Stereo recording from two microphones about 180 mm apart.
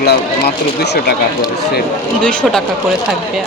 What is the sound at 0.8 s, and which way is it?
Speech, 65° left (ahead or behind).